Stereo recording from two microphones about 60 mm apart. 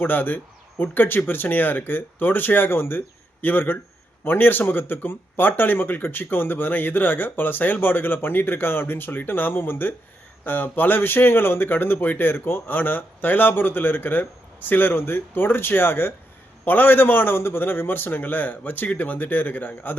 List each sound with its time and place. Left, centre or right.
0.0 s speech: left